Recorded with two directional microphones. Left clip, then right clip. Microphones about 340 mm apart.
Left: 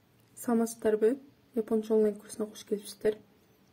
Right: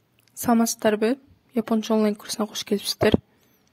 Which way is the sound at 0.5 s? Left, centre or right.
Right.